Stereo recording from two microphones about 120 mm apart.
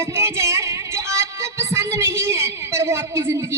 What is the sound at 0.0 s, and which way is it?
Music, 20° right (ahead or behind).